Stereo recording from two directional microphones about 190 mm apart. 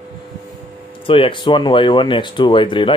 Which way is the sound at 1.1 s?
25° left (ahead or behind).